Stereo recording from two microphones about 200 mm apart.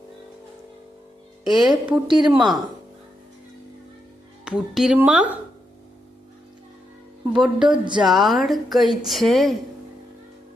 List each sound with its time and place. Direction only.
1.5 s speech: centre (ahead or behind)
2.0 s a woman's voice: 20° right (ahead or behind)
2.3 s speech: centre (ahead or behind)
4.4 s speech: centre (ahead or behind)
7.4 s speech: 5° right (ahead or behind)